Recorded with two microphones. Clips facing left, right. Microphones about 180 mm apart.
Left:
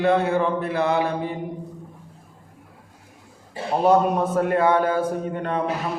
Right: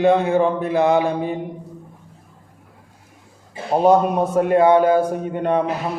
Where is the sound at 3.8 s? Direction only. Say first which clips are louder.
Right 2 dB; 15° right (ahead or behind).